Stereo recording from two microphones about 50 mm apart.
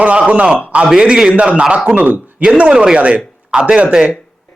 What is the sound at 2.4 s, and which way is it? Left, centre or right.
Speech, right.